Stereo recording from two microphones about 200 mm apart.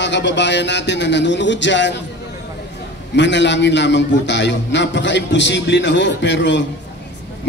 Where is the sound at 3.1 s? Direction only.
60° left (ahead or behind).